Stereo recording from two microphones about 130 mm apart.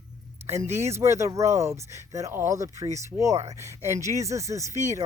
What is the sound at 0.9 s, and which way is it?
Speech, 20° right (ahead or behind).